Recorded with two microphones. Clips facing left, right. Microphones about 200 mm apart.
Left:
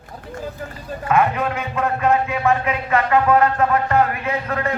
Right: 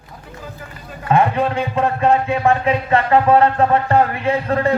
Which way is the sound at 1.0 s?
30° right (ahead or behind).